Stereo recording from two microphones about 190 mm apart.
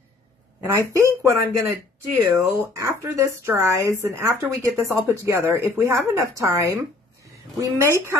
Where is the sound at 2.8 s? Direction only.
15° right (ahead or behind).